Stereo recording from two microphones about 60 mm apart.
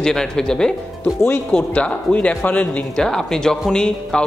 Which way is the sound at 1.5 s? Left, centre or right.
Left.